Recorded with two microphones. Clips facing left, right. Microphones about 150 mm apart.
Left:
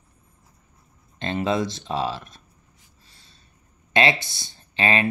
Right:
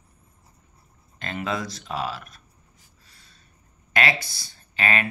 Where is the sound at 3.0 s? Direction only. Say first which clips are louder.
Left 2 dB; 25° left (ahead or behind).